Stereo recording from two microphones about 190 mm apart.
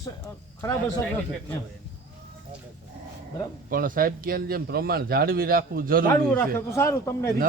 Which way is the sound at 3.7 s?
50° right (ahead or behind).